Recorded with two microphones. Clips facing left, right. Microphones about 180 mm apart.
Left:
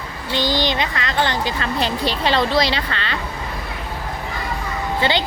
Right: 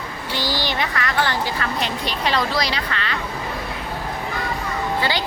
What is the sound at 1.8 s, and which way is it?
Speech, 30° left (ahead or behind).